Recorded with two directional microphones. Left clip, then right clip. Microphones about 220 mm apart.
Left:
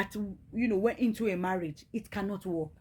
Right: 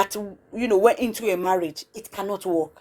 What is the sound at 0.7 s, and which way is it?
A woman's voice, 20° right (ahead or behind).